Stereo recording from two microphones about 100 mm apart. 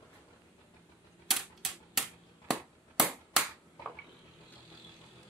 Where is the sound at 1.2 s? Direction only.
5° right (ahead or behind).